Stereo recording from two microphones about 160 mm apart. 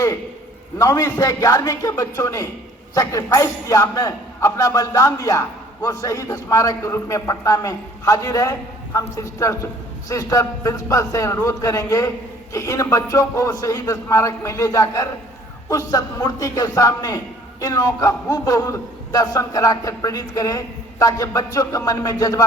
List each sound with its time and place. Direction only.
0.8 s a man's voice: 20° left (ahead or behind)